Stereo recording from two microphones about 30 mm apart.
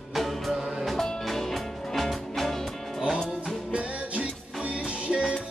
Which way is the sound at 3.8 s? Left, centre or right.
Right.